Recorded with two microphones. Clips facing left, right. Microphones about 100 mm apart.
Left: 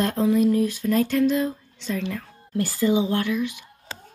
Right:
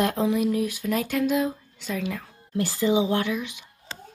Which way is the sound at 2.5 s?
15° right (ahead or behind).